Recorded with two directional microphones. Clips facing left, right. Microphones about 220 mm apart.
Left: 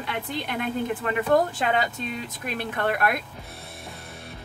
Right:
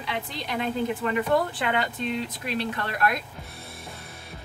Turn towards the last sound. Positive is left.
turn(degrees=0)  # may be behind; listen again after turning